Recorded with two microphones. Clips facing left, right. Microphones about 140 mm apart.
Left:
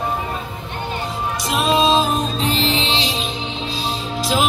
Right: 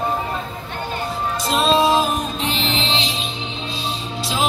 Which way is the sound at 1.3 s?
10° left (ahead or behind).